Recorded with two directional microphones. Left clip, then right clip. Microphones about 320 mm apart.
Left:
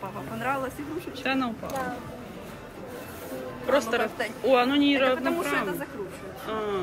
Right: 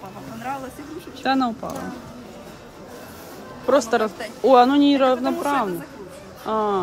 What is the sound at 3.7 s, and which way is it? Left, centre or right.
Speech, centre.